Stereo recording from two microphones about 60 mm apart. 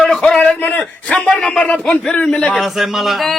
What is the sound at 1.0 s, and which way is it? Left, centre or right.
A man's voice, centre.